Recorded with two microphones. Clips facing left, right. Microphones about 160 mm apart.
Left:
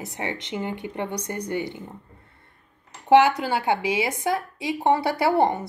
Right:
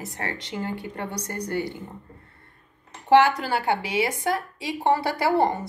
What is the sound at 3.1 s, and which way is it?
A woman's voice, 20° left (ahead or behind).